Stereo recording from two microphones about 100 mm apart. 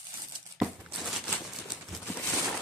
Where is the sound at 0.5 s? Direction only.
5° right (ahead or behind).